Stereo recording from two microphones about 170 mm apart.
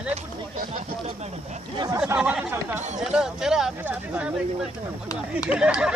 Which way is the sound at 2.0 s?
5° right (ahead or behind).